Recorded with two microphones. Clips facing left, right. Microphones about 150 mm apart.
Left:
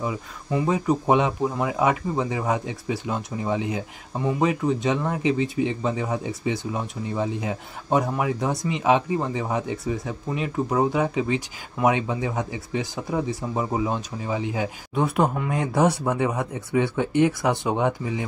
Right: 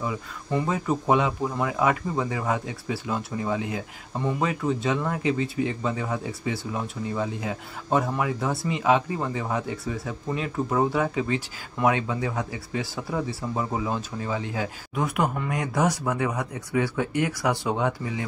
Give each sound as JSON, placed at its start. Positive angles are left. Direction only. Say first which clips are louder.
{"t": 0.7, "sound": "speech", "louder": "left 4 dB", "side_deg": 15}
{"t": 15.0, "sound": "speech", "louder": "left 4 dB", "side_deg": 30}